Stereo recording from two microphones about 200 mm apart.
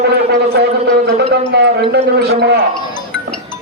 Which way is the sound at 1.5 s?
55° right (ahead or behind).